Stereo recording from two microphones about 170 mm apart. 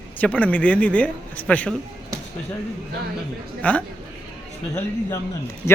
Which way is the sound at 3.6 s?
10° left (ahead or behind).